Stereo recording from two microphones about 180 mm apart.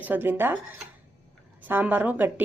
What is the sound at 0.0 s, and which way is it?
Speech, 10° right (ahead or behind).